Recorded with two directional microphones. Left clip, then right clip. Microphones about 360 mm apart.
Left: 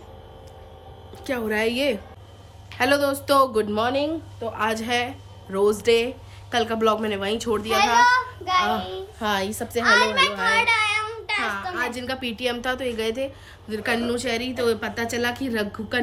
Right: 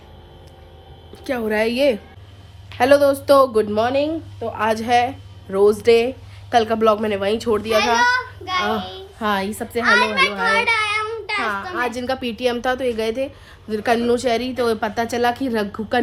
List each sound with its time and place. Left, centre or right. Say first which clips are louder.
1.1 s speech: right 4 dB; centre
7.9 s child singing: even; left
9.1 s a woman's voice: right 4 dB; centre
9.8 s a child's voice: right 2 dB; centre
10.5 s child singing: right 2 dB; centre
11.4 s speech: right 4 dB; centre